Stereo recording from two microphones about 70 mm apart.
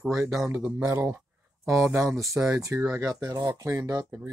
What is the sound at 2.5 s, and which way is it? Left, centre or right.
Speech, right.